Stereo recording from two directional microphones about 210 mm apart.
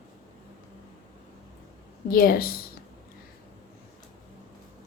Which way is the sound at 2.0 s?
45° left (ahead or behind).